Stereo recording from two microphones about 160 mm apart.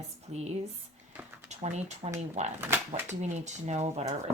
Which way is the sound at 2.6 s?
15° right (ahead or behind).